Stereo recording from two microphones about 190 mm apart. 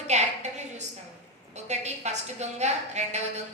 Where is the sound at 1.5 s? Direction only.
35° right (ahead or behind).